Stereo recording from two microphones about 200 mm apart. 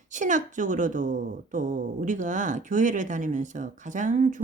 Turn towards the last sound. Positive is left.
turn(degrees=-40)  # may be behind; listen again after turning